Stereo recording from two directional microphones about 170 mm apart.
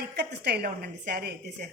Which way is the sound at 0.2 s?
75° right (ahead or behind).